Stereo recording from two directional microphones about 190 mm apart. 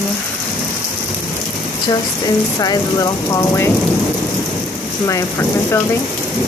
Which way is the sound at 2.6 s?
20° left (ahead or behind).